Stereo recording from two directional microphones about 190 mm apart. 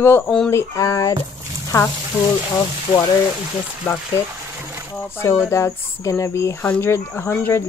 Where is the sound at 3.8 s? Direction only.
10° left (ahead or behind).